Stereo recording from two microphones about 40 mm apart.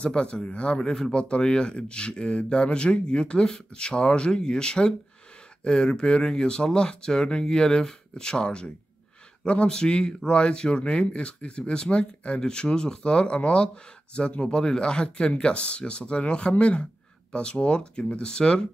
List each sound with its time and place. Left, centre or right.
0.0 s speech: left